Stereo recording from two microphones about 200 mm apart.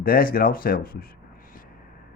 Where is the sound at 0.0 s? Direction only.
45° left (ahead or behind).